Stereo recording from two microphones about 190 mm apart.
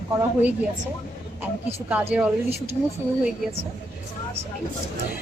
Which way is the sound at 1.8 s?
5° right (ahead or behind).